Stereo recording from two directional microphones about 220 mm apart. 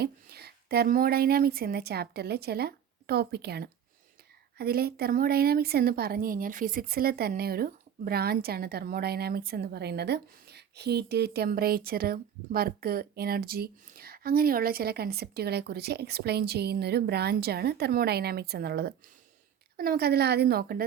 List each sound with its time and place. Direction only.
0.0 s a woman's voice: 45° right (ahead or behind)